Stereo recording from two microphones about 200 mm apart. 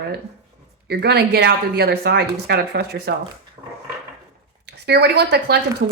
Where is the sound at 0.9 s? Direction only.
55° right (ahead or behind).